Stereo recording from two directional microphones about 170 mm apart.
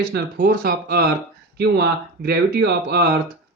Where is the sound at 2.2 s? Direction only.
75° right (ahead or behind).